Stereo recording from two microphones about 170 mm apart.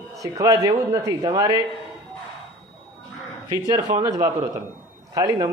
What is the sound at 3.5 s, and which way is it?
A man's voice, 25° right (ahead or behind).